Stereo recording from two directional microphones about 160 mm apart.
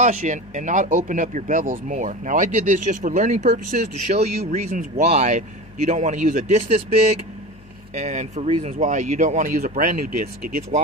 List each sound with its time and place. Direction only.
0.0 s speech: 50° right (ahead or behind)
4.5 s speech: 55° right (ahead or behind)
5.0 s speech: 45° right (ahead or behind)
7.9 s speech: 50° right (ahead or behind)